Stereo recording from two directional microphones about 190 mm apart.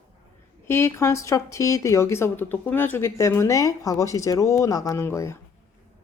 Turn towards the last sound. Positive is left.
turn(degrees=15)  # may be behind; listen again after turning